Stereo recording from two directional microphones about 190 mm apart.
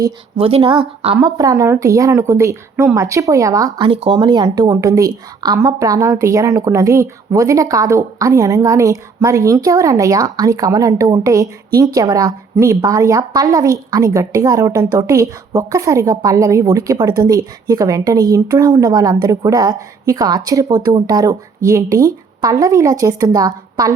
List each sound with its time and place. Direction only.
0.3 s a woman's voice: 30° right (ahead or behind)